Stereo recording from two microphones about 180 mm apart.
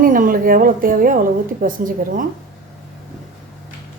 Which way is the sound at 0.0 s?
50° right (ahead or behind).